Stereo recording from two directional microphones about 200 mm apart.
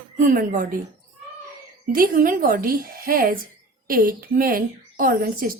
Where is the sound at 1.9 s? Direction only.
45° right (ahead or behind).